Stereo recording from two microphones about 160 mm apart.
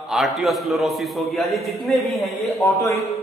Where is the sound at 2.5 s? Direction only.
15° left (ahead or behind).